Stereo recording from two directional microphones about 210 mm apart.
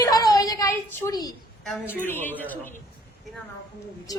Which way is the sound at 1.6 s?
Centre (ahead or behind).